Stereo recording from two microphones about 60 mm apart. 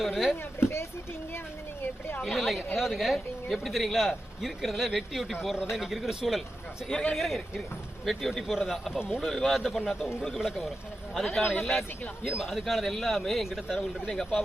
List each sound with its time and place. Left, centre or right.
0.0 s a man's voice: centre
0.6 s speech: left
2.2 s a man's voice: centre
6.8 s a man's voice: centre
14.1 s a man's voice: centre